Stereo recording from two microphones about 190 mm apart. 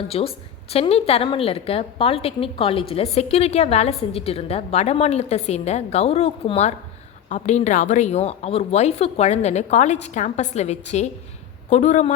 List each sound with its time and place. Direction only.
0.1 s a woman's voice: 30° left (ahead or behind)